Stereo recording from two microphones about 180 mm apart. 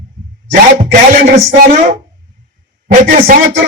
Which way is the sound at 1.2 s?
50° right (ahead or behind).